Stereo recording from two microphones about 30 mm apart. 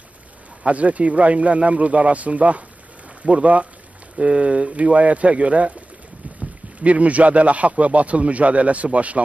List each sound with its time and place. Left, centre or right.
0.7 s speech: right
6.8 s speech: right